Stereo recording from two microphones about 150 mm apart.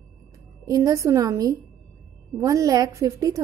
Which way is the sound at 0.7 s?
20° right (ahead or behind).